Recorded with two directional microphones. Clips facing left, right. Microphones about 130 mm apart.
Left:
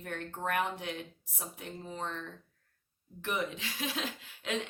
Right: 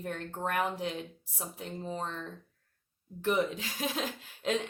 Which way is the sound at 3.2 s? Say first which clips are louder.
Right 6 dB; 35° right (ahead or behind).